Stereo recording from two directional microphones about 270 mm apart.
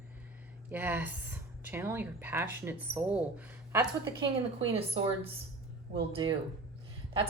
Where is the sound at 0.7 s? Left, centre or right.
Centre.